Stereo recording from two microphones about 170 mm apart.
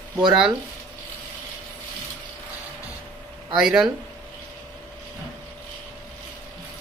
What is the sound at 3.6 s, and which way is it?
Speech, 5° right (ahead or behind).